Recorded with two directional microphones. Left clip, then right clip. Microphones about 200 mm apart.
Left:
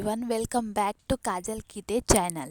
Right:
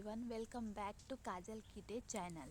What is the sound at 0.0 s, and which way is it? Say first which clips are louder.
A woman's voice: left 19 dB; 55° left (ahead or behind).